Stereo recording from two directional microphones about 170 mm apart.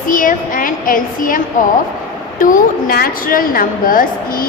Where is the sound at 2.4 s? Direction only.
55° left (ahead or behind).